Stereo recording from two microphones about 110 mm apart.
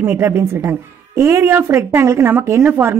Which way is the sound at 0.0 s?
20° right (ahead or behind).